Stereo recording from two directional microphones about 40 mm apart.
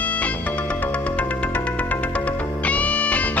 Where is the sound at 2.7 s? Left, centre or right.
Left.